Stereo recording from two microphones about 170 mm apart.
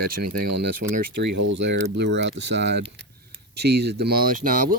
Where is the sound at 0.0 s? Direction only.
60° right (ahead or behind); by 2.8 s 85° right.